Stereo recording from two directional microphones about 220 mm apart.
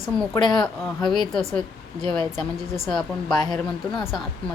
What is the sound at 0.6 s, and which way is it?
A woman's voice, centre (ahead or behind).